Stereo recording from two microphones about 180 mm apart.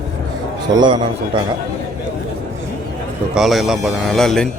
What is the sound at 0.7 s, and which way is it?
Speech, 25° right (ahead or behind).